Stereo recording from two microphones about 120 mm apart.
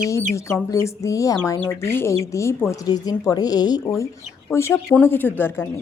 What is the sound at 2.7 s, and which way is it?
A woman's voice, 35° left (ahead or behind).